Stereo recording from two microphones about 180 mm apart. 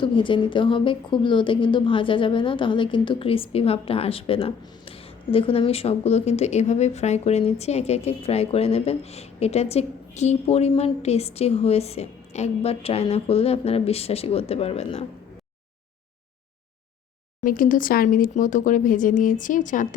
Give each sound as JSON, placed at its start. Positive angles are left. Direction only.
{"t": 0.0, "sound": "a woman's voice", "side_deg": 30}
{"t": 17.4, "sound": "speech", "side_deg": 50}